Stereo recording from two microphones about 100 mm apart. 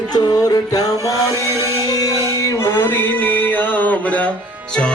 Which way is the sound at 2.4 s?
30° left (ahead or behind).